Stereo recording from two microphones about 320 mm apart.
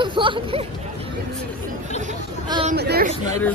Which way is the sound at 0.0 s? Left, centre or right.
Centre.